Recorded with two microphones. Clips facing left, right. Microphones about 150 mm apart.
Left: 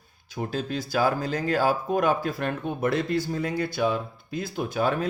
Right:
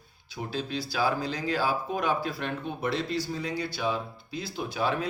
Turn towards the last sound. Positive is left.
turn(degrees=45)  # may be behind; listen again after turning